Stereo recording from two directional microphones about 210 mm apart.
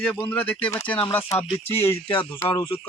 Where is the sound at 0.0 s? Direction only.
5° left (ahead or behind).